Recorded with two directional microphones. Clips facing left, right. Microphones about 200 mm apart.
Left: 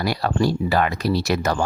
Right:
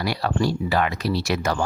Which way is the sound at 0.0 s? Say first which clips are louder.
Left 2 dB; 45° left (ahead or behind).